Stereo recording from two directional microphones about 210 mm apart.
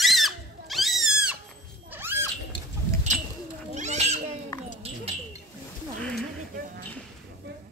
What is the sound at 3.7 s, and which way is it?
Cat, 35° right (ahead or behind).